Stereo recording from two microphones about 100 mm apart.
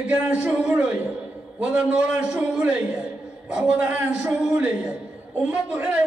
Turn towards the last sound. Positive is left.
turn(degrees=-10)  # may be behind; listen again after turning